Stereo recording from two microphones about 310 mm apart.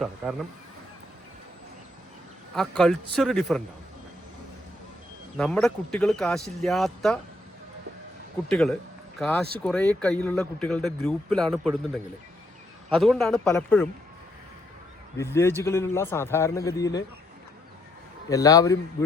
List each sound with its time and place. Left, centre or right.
2.6 s speech: centre
5.4 s speech: centre
8.4 s speech: centre
12.9 s speech: centre
15.2 s a man's voice: centre
18.3 s a man's voice: centre